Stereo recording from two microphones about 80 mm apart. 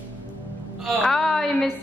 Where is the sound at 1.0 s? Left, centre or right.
Centre.